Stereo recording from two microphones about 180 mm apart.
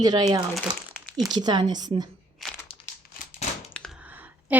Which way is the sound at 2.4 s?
Centre (ahead or behind).